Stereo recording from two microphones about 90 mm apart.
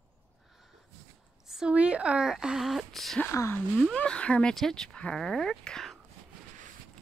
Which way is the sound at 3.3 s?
30° left (ahead or behind).